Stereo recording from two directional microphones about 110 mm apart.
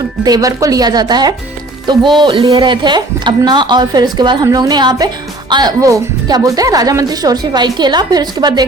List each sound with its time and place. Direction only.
0.3 s a woman's voice: 35° right (ahead or behind)